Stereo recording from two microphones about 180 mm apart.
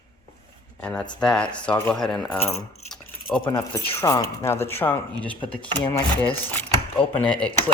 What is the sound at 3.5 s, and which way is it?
Speech, 20° left (ahead or behind).